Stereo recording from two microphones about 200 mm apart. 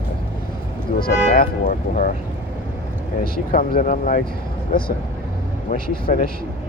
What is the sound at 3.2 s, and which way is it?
Speech, 45° left (ahead or behind).